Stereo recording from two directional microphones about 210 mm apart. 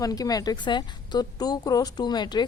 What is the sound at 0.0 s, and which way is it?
A woman's voice, 15° left (ahead or behind).